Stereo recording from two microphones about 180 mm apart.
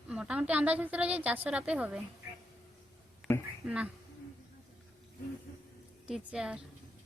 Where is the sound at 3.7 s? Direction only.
5° right (ahead or behind).